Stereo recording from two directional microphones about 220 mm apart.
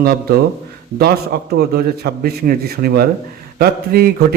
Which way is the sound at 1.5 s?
45° right (ahead or behind).